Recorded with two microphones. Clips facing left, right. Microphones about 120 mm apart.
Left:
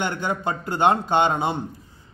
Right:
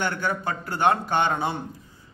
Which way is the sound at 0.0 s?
20° left (ahead or behind).